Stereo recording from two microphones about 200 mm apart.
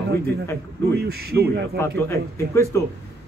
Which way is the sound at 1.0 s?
50° right (ahead or behind).